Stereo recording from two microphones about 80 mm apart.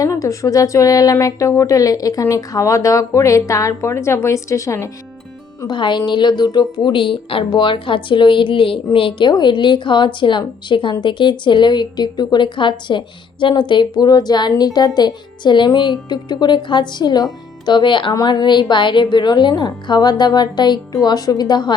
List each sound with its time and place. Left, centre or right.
0.0 s speech: left
5.6 s a woman's voice: left
17.7 s speech: left
18.3 s a woman's voice: left